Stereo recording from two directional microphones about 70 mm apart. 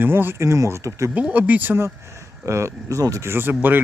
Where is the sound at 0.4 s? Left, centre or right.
Right.